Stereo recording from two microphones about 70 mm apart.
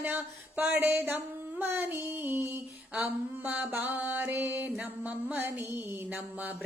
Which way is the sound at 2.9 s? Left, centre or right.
Right.